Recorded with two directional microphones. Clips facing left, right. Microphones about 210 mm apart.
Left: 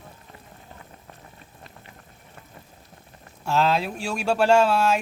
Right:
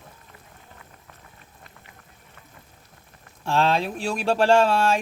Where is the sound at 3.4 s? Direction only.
5° left (ahead or behind).